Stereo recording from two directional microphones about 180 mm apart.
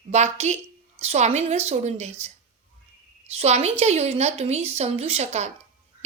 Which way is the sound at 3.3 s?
35° right (ahead or behind).